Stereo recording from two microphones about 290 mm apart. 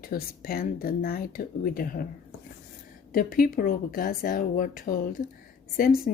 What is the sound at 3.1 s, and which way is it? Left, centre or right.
Speech, left.